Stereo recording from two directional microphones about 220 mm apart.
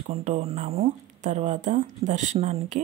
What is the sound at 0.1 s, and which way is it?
Speech, 30° right (ahead or behind).